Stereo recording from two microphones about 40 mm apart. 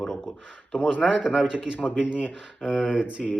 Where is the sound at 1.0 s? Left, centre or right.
Centre.